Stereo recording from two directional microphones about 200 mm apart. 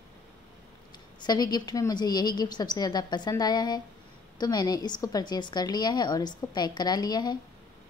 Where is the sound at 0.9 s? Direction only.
20° left (ahead or behind).